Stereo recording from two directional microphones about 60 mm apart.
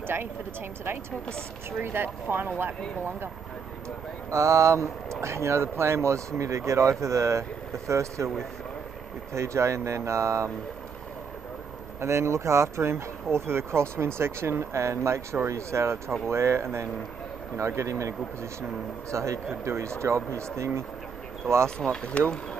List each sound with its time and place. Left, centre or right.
0.0 s speech: right
1.8 s speech: right
4.3 s speech: right
9.3 s speech: right
12.0 s speech: right
21.6 s speech: centre